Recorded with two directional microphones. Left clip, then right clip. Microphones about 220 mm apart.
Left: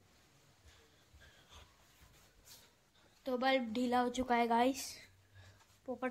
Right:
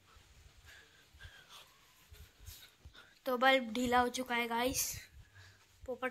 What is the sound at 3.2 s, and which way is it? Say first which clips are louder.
Speech: right 4 dB; 5° left (ahead or behind).